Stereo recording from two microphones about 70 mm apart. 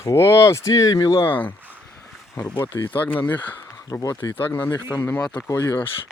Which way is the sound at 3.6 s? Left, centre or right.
Left.